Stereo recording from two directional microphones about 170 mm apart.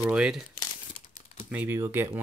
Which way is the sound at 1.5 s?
10° right (ahead or behind).